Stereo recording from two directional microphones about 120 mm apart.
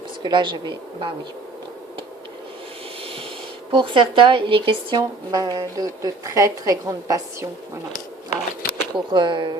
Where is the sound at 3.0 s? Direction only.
50° right (ahead or behind).